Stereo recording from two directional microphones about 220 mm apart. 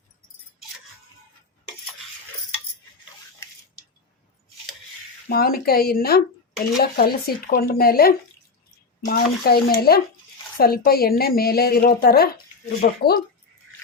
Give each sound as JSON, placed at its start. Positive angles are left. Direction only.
{"t": 5.3, "sound": "a woman's voice", "side_deg": 45}